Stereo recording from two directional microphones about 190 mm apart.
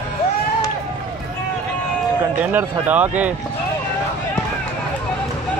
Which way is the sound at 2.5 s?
10° right (ahead or behind).